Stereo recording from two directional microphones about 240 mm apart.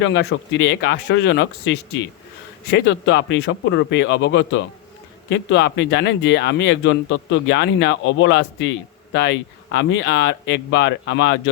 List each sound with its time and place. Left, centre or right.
0.0 s speech: left